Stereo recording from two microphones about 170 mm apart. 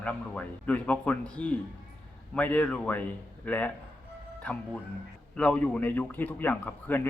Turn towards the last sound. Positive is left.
turn(degrees=10)  # may be behind; listen again after turning